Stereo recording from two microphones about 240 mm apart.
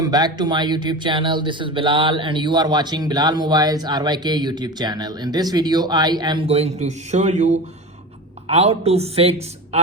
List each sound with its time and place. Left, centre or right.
0.0 s a woman's voice: centre